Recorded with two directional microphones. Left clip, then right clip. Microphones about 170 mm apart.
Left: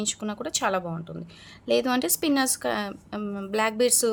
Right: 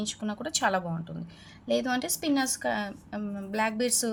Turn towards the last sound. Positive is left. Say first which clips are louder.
# left 5 dB
turn(degrees=30)  # may be behind; listen again after turning